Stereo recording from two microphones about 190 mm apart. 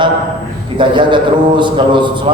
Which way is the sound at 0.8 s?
25° right (ahead or behind).